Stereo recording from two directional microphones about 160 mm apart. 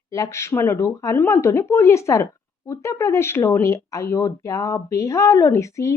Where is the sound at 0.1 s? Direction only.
20° left (ahead or behind).